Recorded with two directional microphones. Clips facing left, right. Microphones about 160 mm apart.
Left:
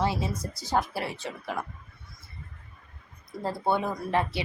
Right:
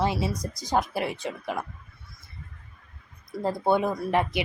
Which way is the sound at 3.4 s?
15° right (ahead or behind).